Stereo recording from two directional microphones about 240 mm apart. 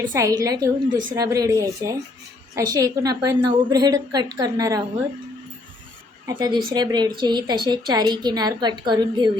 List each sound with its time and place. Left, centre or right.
0.0 s a woman's voice: centre
6.2 s a woman's voice: centre